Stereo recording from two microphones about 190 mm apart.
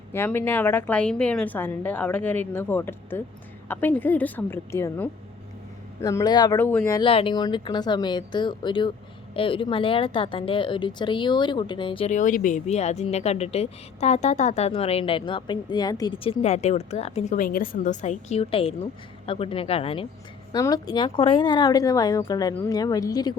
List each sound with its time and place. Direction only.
0.1 s a woman's voice: 10° left (ahead or behind)
7.0 s speech: 30° left (ahead or behind)